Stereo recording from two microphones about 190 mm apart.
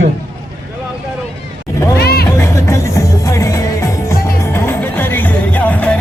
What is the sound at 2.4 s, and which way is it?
Music, 15° left (ahead or behind).